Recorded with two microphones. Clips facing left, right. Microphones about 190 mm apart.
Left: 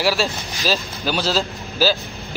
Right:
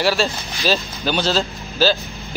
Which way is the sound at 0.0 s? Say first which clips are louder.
Right 1 dB; centre (ahead or behind).